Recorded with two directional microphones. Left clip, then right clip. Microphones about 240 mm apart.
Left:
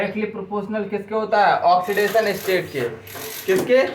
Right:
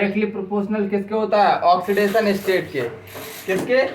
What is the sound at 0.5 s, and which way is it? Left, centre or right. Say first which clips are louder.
Speech: right 2 dB; right.